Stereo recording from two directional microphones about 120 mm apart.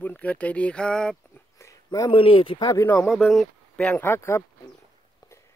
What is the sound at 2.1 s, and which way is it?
Speech, 45° left (ahead or behind).